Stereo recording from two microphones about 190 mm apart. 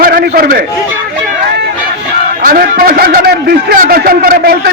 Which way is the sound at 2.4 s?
50° right (ahead or behind).